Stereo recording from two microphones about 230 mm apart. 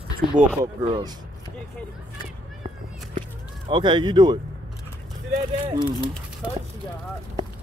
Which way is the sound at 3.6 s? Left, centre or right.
Centre.